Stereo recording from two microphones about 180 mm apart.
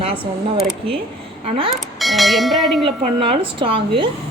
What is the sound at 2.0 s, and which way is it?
Speech, centre (ahead or behind).